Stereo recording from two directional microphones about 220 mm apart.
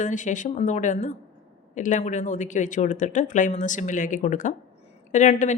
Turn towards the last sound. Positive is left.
turn(degrees=35)  # may be behind; listen again after turning